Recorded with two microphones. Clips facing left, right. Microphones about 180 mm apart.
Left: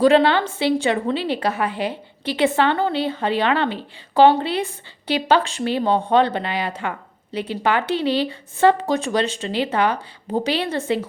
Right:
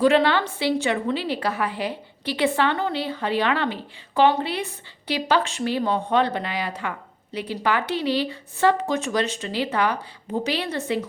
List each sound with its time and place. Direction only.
0.0 s a woman's voice: 30° left (ahead or behind)